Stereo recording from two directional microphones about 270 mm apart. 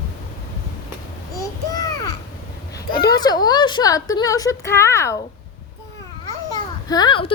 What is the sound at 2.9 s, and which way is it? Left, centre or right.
Speech, left.